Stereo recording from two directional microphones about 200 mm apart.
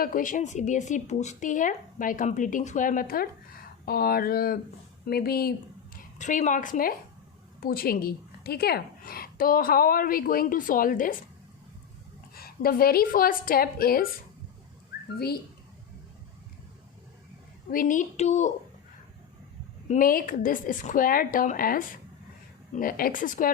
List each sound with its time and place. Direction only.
0.0 s a woman's voice: 40° left (ahead or behind)
12.3 s a woman's voice: 50° left (ahead or behind)
17.7 s speech: 45° left (ahead or behind)
19.9 s a woman's voice: 45° left (ahead or behind)